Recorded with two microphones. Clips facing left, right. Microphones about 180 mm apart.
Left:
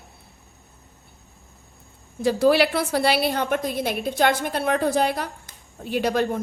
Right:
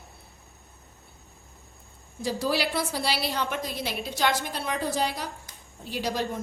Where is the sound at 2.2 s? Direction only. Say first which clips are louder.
Left 9 dB; 60° left (ahead or behind).